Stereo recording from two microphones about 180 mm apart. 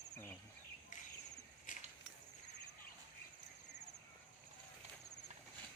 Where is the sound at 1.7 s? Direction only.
45° left (ahead or behind).